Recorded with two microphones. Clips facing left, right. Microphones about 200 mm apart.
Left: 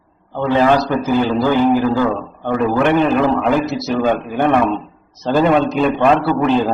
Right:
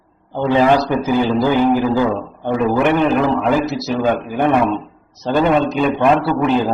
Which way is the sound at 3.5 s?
Centre (ahead or behind).